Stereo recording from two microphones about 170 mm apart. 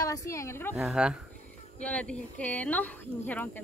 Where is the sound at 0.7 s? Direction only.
Centre (ahead or behind).